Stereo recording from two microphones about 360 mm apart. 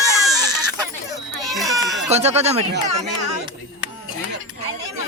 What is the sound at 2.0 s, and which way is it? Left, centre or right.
Speech, centre.